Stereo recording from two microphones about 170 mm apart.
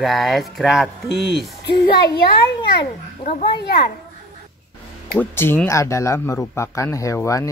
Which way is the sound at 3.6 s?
70° left (ahead or behind).